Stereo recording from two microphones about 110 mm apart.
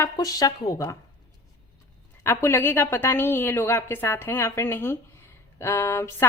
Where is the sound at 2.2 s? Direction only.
25° left (ahead or behind).